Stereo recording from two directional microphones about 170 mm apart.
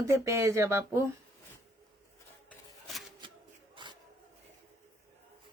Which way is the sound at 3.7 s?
25° right (ahead or behind).